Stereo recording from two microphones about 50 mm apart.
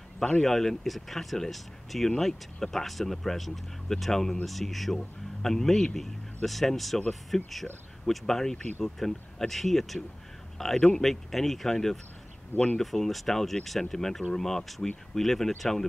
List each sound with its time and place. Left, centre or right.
0.2 s speech: centre